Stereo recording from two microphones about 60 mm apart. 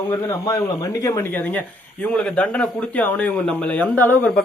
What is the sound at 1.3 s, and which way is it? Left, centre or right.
Speech, left.